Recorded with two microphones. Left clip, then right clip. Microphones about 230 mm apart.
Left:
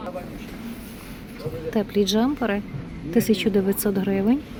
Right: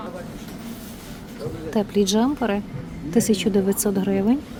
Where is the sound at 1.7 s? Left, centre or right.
Centre.